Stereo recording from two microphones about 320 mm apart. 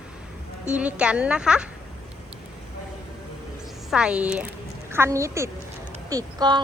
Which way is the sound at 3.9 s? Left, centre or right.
Centre.